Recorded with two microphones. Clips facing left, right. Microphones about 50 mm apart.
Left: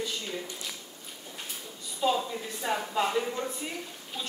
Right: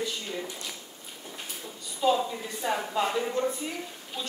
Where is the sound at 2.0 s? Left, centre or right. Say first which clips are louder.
Right 3 dB; centre.